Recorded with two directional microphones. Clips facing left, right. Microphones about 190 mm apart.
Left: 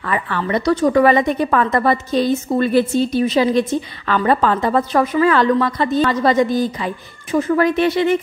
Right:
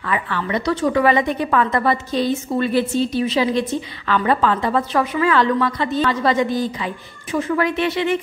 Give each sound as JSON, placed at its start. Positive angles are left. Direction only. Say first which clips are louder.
{"t": 0.0, "sound": "a woman's voice", "louder": "left 2 dB", "side_deg": 40}